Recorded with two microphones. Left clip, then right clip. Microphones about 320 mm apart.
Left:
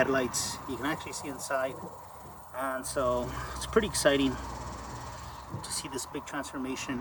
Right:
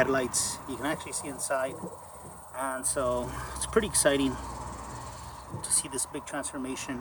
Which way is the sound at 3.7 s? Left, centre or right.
Right.